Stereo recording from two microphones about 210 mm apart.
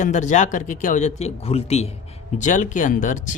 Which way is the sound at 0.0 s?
35° left (ahead or behind).